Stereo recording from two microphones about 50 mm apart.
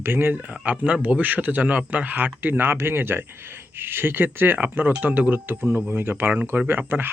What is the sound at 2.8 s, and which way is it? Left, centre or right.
Speech, right.